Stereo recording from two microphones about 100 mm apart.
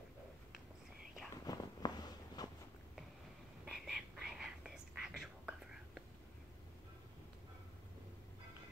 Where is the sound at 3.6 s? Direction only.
5° right (ahead or behind).